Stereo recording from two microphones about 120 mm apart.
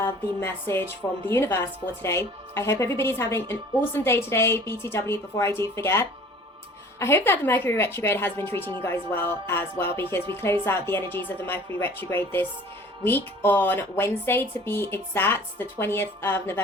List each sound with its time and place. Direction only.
0.0 s a woman's voice: 20° left (ahead or behind)